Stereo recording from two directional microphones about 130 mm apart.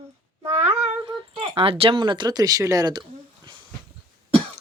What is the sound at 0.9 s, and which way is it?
Speech, 40° right (ahead or behind).